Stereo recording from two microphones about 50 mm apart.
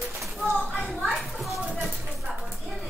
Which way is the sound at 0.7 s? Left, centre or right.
Centre.